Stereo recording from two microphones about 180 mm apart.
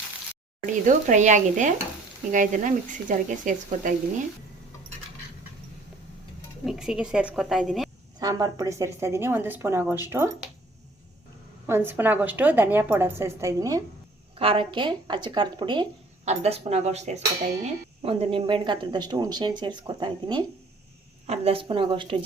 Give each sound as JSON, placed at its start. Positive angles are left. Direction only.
{"t": 0.9, "sound": "speech", "side_deg": -45}
{"t": 6.7, "sound": "a woman's voice", "side_deg": -5}
{"t": 8.2, "sound": "a woman's voice", "side_deg": -20}
{"t": 11.6, "sound": "a woman's voice", "side_deg": -10}
{"t": 14.3, "sound": "speech", "side_deg": -30}
{"t": 16.2, "sound": "speech", "side_deg": -40}